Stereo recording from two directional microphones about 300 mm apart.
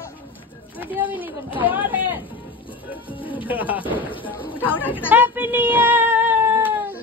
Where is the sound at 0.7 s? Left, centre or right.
Centre.